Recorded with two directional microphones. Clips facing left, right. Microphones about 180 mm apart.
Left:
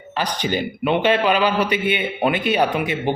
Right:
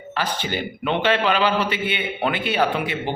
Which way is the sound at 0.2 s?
15° left (ahead or behind).